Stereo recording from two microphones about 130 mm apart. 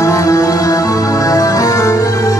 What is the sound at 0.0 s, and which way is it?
Music, 25° left (ahead or behind).